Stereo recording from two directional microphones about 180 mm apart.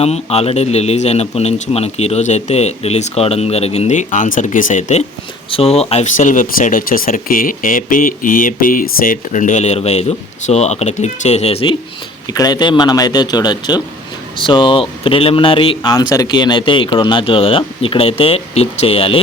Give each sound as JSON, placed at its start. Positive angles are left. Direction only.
{"t": 0.0, "sound": "speech", "side_deg": 35}
{"t": 12.3, "sound": "speech", "side_deg": 20}